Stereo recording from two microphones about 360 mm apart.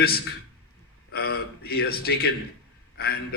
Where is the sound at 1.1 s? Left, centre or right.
Left.